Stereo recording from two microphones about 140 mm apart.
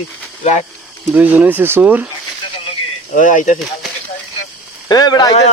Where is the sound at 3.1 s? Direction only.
70° left (ahead or behind).